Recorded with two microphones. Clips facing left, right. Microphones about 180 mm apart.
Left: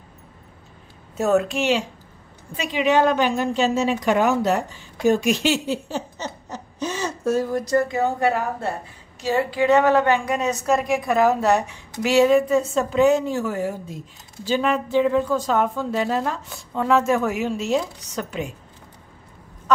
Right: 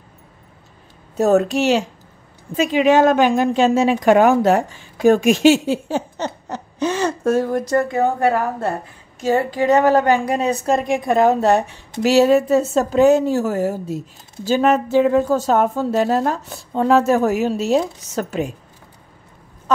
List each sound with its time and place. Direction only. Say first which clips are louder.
1.2 s a woman's voice: right 4 dB; 40° right (ahead or behind)
12.0 s a woman's voice: right 3 dB; 40° right (ahead or behind)